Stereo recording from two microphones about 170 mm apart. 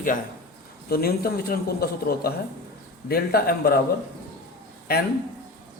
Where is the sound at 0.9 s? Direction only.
65° left (ahead or behind).